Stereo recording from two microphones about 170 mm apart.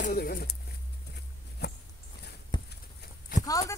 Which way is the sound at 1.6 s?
70° left (ahead or behind).